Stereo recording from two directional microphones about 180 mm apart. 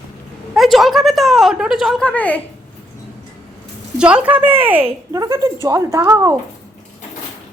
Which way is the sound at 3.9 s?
5° right (ahead or behind).